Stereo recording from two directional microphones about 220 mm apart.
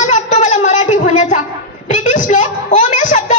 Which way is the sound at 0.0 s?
35° left (ahead or behind).